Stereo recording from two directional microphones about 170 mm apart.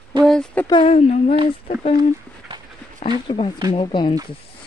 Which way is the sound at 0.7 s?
35° left (ahead or behind).